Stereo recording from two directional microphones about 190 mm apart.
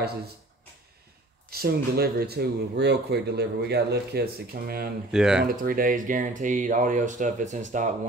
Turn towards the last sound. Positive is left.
turn(degrees=-40)  # may be behind; listen again after turning